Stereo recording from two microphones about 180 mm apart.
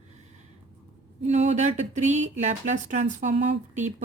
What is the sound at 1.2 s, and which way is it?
A woman's voice, 40° right (ahead or behind).